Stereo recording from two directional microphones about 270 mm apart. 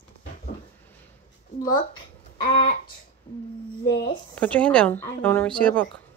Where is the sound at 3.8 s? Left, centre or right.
Left.